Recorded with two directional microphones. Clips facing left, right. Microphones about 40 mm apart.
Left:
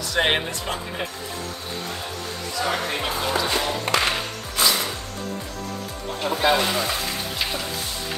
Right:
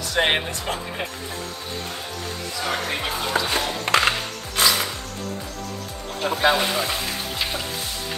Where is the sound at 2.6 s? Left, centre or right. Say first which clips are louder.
Left 1 dB; centre.